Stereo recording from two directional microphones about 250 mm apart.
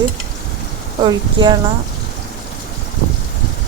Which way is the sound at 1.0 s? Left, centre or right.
Centre.